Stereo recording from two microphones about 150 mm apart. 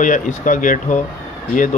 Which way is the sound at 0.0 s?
60° left (ahead or behind).